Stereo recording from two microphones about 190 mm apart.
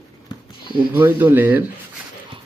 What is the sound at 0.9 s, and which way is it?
Speech, 10° right (ahead or behind).